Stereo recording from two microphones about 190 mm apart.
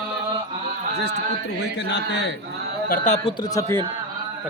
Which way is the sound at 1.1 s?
60° left (ahead or behind).